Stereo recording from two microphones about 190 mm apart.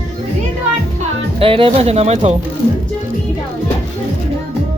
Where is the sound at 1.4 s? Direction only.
30° right (ahead or behind).